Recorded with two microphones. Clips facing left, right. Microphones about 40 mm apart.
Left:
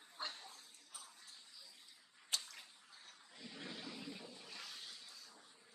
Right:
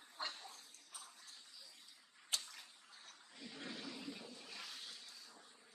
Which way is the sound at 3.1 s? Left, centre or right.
Centre.